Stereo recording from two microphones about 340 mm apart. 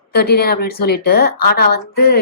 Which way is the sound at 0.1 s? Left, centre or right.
Left.